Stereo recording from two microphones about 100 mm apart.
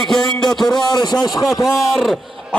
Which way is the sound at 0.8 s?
45° left (ahead or behind).